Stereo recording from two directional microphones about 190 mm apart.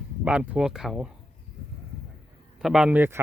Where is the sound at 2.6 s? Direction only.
5° right (ahead or behind).